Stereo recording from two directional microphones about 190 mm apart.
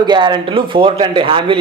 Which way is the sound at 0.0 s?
25° right (ahead or behind).